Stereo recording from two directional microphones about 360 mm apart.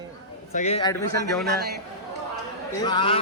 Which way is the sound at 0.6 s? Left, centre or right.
Centre.